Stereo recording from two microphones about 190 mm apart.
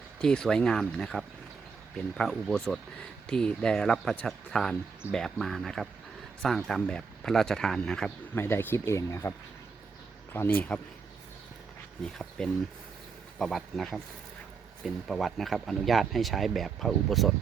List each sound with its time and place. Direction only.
0.2 s speech: 5° left (ahead or behind)
10.3 s speech: 10° left (ahead or behind)
12.0 s speech: 5° left (ahead or behind)